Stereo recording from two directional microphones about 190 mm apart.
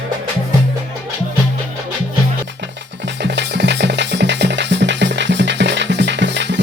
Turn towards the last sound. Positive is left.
turn(degrees=-70)  # may be behind; listen again after turning